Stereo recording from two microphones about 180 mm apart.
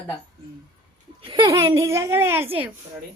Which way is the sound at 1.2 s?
25° right (ahead or behind).